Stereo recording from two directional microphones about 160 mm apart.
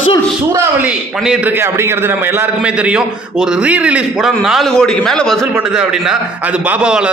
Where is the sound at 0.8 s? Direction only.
5° right (ahead or behind).